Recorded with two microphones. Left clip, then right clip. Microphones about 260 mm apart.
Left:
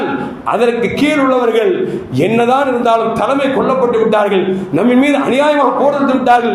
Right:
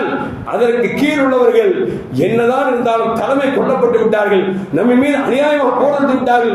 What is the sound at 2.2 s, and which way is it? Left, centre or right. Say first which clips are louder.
Speech: left 1 dB; left.